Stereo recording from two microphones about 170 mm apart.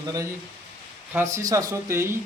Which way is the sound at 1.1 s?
15° right (ahead or behind).